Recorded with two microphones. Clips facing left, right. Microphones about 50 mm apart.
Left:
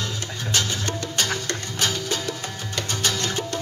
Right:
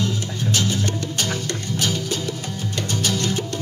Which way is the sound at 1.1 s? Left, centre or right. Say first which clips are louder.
Even; left.